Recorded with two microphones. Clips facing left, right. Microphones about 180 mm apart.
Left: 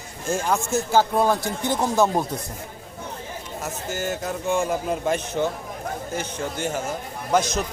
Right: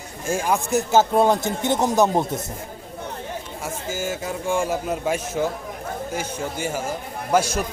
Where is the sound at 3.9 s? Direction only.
10° right (ahead or behind).